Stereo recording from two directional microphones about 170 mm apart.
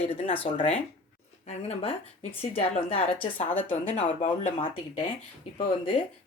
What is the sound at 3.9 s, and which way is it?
Speech, 45° left (ahead or behind).